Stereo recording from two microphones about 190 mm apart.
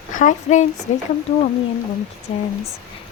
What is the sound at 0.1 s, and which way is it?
Speech, 45° left (ahead or behind).